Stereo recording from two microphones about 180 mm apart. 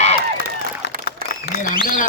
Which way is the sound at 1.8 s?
45° left (ahead or behind).